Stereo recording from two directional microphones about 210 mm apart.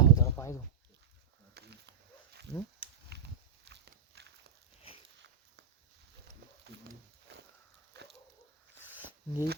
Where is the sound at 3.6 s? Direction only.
55° right (ahead or behind).